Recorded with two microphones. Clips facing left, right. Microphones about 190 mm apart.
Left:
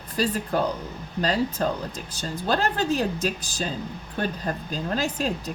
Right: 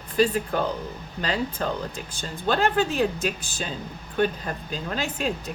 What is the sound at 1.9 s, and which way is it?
Speech, 40° left (ahead or behind).